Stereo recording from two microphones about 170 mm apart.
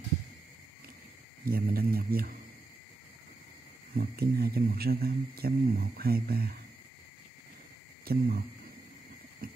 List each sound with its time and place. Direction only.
1.4 s speech: 60° right (ahead or behind)
3.9 s speech: 65° right (ahead or behind)
8.0 s speech: 65° right (ahead or behind)
9.4 s clip-clop: 60° right (ahead or behind)